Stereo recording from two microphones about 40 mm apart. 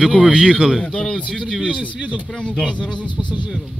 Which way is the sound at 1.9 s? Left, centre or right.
Right.